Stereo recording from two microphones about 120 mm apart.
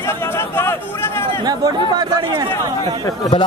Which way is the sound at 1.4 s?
35° right (ahead or behind).